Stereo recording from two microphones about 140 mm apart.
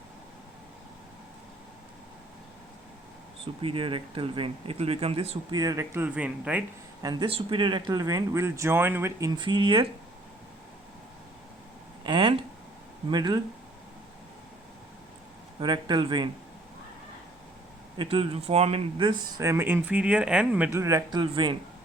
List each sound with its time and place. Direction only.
3.4 s speech: 40° right (ahead or behind)
5.5 s speech: 25° right (ahead or behind); by 6.7 s 10° right (ahead or behind)
7.0 s speech: 30° right (ahead or behind)
9.3 s speech: 35° right (ahead or behind)
12.0 s a sound: 35° right (ahead or behind)
13.1 s speech: 30° right (ahead or behind)
15.6 s speech: 35° right (ahead or behind)
17.9 s speech: 40° right (ahead or behind)
19.4 s speech: 20° right (ahead or behind)
20.7 s speech: 20° right (ahead or behind)